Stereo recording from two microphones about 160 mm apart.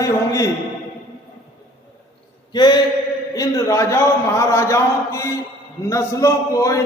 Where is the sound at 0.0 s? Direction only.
20° left (ahead or behind).